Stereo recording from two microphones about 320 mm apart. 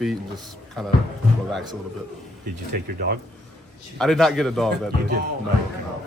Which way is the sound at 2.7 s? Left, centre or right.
Right.